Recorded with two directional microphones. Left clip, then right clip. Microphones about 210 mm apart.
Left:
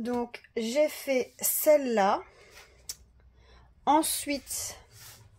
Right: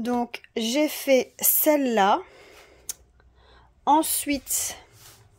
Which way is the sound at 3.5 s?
15° right (ahead or behind).